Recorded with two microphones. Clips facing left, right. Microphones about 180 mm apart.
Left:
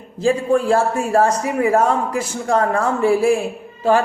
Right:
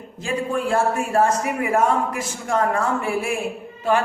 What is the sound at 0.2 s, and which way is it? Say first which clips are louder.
A man's voice: left 7 dB; 30° left (ahead or behind).